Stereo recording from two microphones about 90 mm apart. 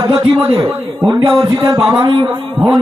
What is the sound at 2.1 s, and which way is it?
Speech, 55° right (ahead or behind).